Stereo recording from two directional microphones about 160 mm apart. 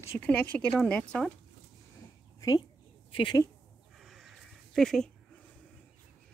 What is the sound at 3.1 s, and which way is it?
Speech, 35° left (ahead or behind).